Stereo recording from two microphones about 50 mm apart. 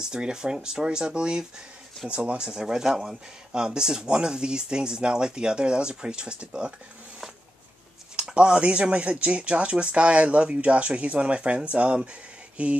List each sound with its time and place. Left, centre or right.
0.0 s speech: centre
8.2 s speech: centre